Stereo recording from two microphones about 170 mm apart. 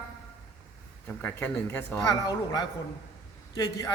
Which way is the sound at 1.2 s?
10° left (ahead or behind).